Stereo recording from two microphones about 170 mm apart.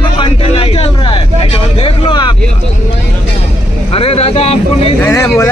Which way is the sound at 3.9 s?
35° left (ahead or behind).